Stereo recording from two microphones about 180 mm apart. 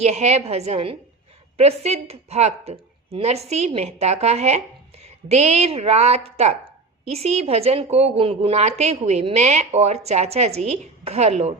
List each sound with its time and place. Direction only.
0.0 s speech: 35° right (ahead or behind)